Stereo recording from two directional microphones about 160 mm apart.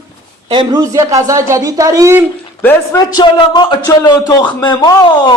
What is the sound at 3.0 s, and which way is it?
Speech, 25° left (ahead or behind).